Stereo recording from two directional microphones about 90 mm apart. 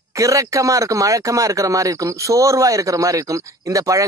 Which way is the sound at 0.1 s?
35° right (ahead or behind).